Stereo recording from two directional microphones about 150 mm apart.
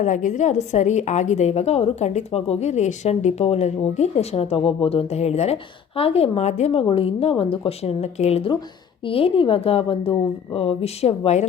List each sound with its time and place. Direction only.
0.0 s a woman's voice: 60° left (ahead or behind)